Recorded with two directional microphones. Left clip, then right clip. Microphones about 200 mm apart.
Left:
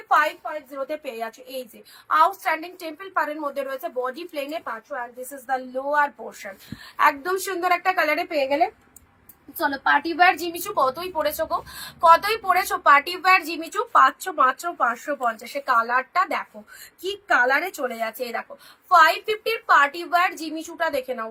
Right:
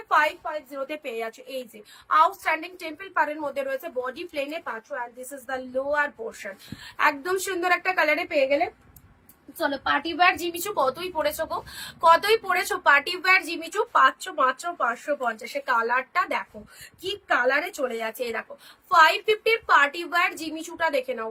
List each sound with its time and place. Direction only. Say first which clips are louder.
0.1 s a woman's voice: left 2 dB; 20° right (ahead or behind)